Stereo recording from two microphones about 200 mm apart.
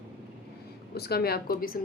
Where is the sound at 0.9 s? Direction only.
50° left (ahead or behind).